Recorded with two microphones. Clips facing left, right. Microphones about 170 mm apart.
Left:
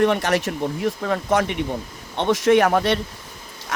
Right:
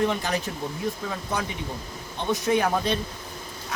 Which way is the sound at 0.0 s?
70° left (ahead or behind).